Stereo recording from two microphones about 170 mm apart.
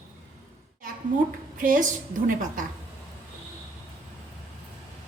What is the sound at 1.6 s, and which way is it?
A woman's voice, 50° right (ahead or behind).